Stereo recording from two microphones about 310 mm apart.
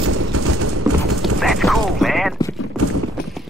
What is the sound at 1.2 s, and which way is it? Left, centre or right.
Clip-clop, centre.